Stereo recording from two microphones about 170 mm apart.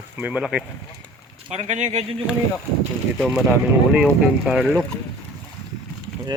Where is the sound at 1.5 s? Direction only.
40° right (ahead or behind).